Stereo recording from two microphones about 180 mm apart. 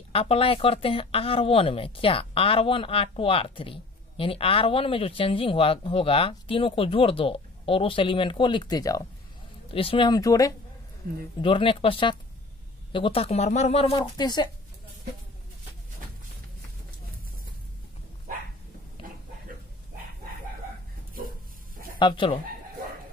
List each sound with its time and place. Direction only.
0.1 s speech: 30° left (ahead or behind)
21.9 s speech: 25° left (ahead or behind)